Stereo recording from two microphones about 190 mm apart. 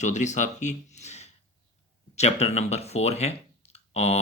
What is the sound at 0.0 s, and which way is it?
Speech, 40° left (ahead or behind).